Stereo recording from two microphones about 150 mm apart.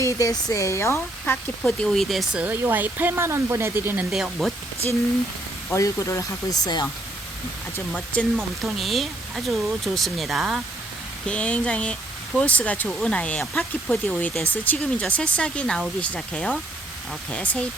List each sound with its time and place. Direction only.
0.0 s speech: 20° left (ahead or behind)
1.2 s speech: 5° left (ahead or behind); by 4.0 s 15° right (ahead or behind)
4.1 s speech: centre (ahead or behind)
5.7 s speech: 20° left (ahead or behind)
7.9 s speech: 10° left (ahead or behind)